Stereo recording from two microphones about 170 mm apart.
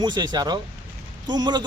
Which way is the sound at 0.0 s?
25° right (ahead or behind).